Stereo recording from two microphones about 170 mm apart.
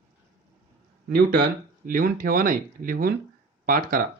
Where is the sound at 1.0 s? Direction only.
65° right (ahead or behind).